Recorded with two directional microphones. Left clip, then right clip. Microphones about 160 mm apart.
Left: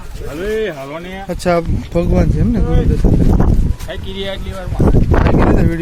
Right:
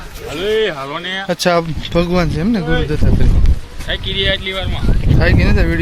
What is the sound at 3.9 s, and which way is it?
Speech, 45° left (ahead or behind).